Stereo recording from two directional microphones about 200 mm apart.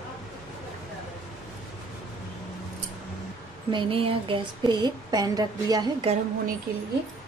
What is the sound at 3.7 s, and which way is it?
Speech, 25° right (ahead or behind).